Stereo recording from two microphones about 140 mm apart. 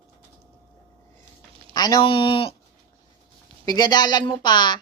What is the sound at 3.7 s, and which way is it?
A woman's voice, 30° left (ahead or behind).